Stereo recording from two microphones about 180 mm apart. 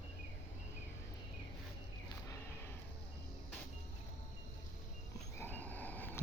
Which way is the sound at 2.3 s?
15° left (ahead or behind).